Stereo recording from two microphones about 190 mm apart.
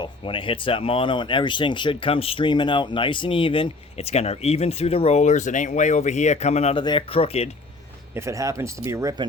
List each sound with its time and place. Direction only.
0.0 s speech: 25° left (ahead or behind)
8.1 s speech: 15° right (ahead or behind)